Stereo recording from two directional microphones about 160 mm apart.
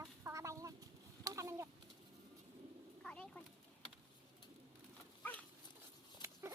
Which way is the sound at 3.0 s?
5° left (ahead or behind).